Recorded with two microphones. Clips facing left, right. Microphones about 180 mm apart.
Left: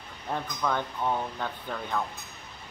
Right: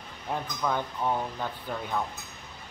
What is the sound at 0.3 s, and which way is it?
Speech, 10° right (ahead or behind).